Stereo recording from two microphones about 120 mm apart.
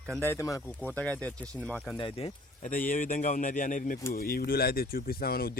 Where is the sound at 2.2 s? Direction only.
75° left (ahead or behind); by 4.0 s 90° left.